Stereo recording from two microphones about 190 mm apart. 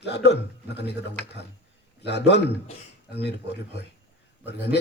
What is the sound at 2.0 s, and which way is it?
Speech, 65° left (ahead or behind).